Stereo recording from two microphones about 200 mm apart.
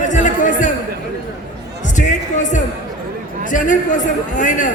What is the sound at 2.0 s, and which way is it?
Music, 40° left (ahead or behind).